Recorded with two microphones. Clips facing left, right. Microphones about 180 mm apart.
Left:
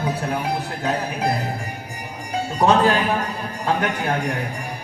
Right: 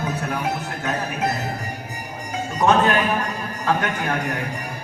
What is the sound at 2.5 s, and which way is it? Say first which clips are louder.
Speech: left 1 dB; 30° left (ahead or behind).